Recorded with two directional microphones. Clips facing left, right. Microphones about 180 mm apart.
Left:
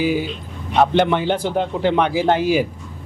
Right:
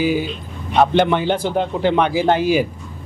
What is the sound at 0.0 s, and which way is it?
Speech, 15° right (ahead or behind).